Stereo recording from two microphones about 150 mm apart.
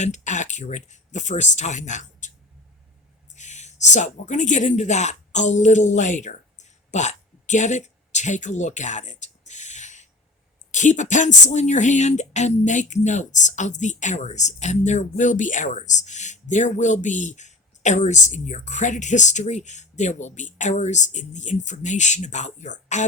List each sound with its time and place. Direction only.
0.0 s speech: 55° left (ahead or behind)
3.3 s speech: 50° left (ahead or behind)